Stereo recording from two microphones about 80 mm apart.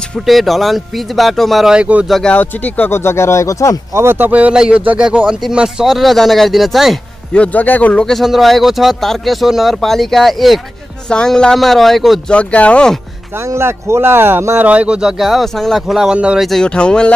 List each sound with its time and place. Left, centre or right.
0.3 s speech: centre
1.7 s speech: centre
2.0 s speech: centre
2.3 s a man's voice: left
2.9 s speech: left
3.9 s speech: right; by 7.0 s centre
7.3 s a man's voice: centre
8.0 s speech: centre
12.3 s speech: centre
13.5 s speech: right
14.7 s speech: centre
16.3 s speech: centre